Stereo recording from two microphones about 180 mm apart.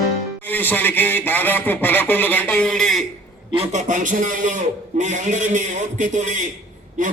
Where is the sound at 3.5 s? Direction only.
45° right (ahead or behind).